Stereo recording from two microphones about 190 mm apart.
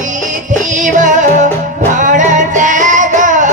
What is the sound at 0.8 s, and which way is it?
Music, 40° right (ahead or behind).